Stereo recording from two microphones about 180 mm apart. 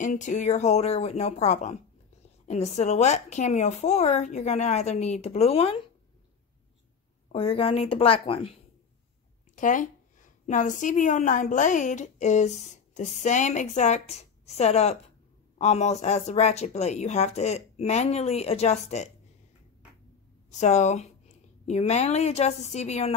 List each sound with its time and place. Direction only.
0.0 s a woman's voice: 40° left (ahead or behind)
7.3 s a woman's voice: 30° left (ahead or behind)
9.6 s a woman's voice: 45° left (ahead or behind)
20.5 s a woman's voice: 40° left (ahead or behind)